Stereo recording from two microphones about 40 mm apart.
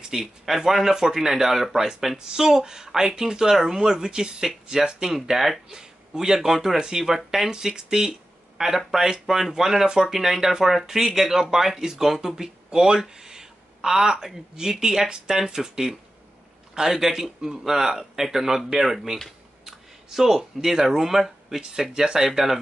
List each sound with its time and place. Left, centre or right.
0.1 s speech: centre
13.1 s a sound: centre
13.8 s speech: centre